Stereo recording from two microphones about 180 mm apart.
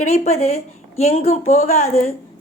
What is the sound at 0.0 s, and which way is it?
A woman's voice, 40° left (ahead or behind).